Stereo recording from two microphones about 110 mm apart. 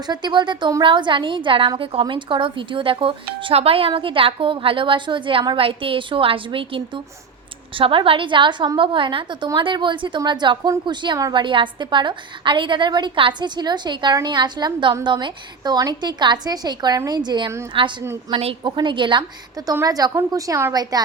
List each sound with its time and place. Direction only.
0.1 s a woman's voice: 40° right (ahead or behind)
18.3 s a woman's voice: 65° right (ahead or behind)
18.6 s a woman's voice: 45° right (ahead or behind); by 20.7 s 25° right (ahead or behind)